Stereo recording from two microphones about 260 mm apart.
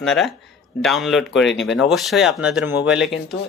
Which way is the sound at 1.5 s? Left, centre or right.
Centre.